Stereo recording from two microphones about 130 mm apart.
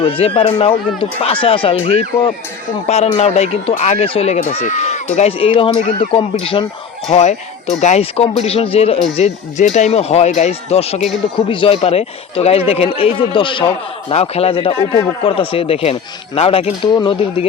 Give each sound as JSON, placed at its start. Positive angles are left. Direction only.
{"t": 0.0, "sound": "speech", "side_deg": 45}
{"t": 4.4, "sound": "speech", "side_deg": 70}
{"t": 5.4, "sound": "speech", "side_deg": 45}
{"t": 7.1, "sound": "speech", "side_deg": 65}
{"t": 9.1, "sound": "speech", "side_deg": 60}
{"t": 11.3, "sound": "speech", "side_deg": 40}
{"t": 14.1, "sound": "speech", "side_deg": 50}